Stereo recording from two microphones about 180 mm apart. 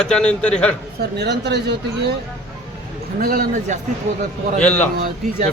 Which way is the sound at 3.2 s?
55° right (ahead or behind).